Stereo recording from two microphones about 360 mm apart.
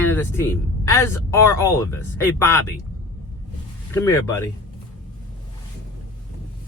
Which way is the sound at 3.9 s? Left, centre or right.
Centre.